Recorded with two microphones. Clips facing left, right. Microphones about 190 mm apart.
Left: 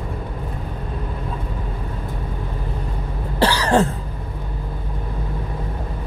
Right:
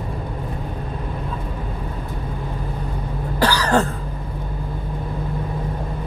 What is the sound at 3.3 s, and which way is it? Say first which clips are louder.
Cough: left 1 dB; 25° left (ahead or behind).